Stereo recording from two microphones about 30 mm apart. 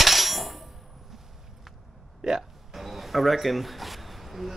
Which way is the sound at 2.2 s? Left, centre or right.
Right.